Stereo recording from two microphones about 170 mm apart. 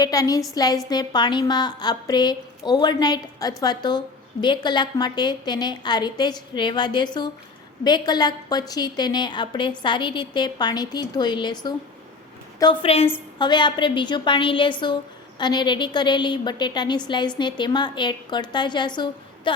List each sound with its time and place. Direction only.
0.0 s a woman's voice: 20° left (ahead or behind)